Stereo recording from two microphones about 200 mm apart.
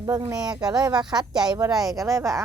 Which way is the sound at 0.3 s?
20° right (ahead or behind).